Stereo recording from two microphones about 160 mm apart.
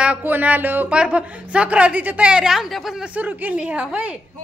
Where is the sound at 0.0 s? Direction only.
10° right (ahead or behind).